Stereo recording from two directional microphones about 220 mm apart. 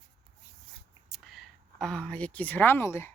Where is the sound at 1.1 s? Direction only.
Centre (ahead or behind).